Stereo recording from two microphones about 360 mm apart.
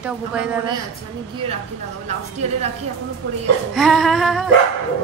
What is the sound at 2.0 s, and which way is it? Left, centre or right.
Speech, centre.